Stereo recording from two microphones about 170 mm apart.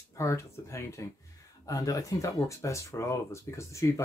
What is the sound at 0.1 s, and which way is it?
Speech, 15° left (ahead or behind).